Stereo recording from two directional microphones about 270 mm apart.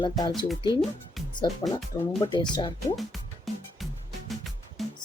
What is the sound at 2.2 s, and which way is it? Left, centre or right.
Speech, centre.